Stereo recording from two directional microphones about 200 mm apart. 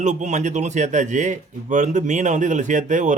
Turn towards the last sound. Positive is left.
turn(degrees=-40)  # may be behind; listen again after turning